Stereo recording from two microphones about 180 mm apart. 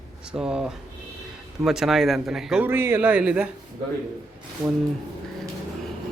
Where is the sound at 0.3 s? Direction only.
5° right (ahead or behind).